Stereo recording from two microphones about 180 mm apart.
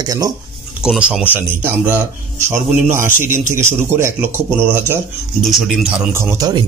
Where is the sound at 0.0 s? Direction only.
20° right (ahead or behind).